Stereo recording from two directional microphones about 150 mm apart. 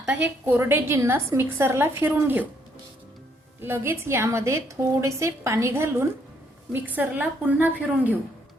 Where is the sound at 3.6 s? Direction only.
15° right (ahead or behind).